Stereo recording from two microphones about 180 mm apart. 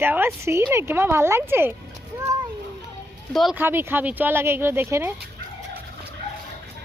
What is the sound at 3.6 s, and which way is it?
Speech, 10° right (ahead or behind).